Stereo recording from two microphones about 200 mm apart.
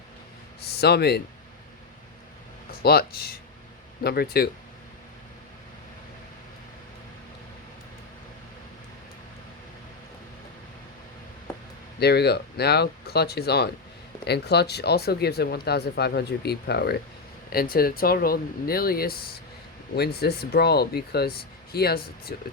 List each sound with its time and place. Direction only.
0.6 s speech: 55° left (ahead or behind)
2.8 s speech: 50° left (ahead or behind)
11.9 s speech: 55° left (ahead or behind)